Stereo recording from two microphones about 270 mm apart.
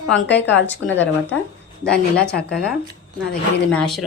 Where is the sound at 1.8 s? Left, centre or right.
Left.